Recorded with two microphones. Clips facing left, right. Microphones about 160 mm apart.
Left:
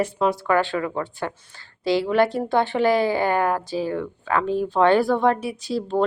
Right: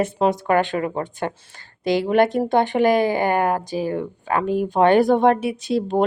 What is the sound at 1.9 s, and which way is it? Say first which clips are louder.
Speech: right 1 dB; 50° right (ahead or behind).